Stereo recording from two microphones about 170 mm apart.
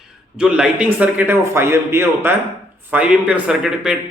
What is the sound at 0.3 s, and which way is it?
A man's voice, 5° right (ahead or behind).